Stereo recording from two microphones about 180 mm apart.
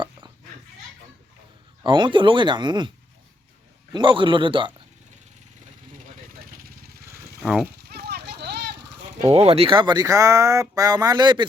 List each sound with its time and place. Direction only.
1.8 s speech: 25° right (ahead or behind)
3.9 s speech: 25° right (ahead or behind)
6.6 s vehicle: 55° right (ahead or behind)
7.1 s a sound: 5° right (ahead or behind)
7.9 s clip-clop: 65° right (ahead or behind)
9.3 s speech: 35° right (ahead or behind)